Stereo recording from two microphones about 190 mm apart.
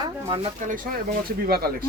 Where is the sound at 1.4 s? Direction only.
55° right (ahead or behind).